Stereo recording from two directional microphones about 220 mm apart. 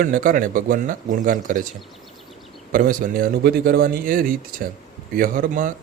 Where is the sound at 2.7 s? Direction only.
40° right (ahead or behind).